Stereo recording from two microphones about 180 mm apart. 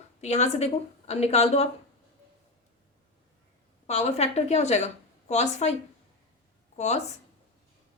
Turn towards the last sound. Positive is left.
turn(degrees=40)  # may be behind; listen again after turning